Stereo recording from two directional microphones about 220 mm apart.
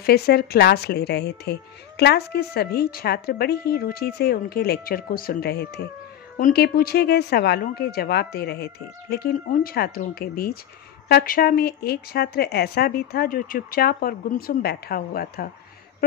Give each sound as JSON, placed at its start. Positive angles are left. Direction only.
{"t": 0.0, "sound": "a woman's voice", "side_deg": 45}